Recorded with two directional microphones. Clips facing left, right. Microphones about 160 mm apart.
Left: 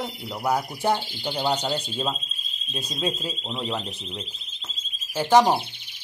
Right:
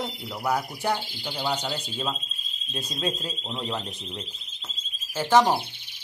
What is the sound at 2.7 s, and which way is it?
A man's voice, 10° left (ahead or behind).